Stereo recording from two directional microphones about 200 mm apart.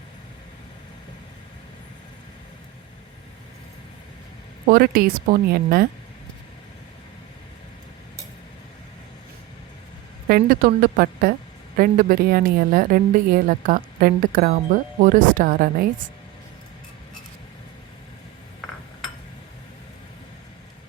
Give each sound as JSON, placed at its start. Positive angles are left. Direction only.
{"t": 4.6, "sound": "a woman's voice", "side_deg": -45}
{"t": 10.2, "sound": "a woman's voice", "side_deg": -45}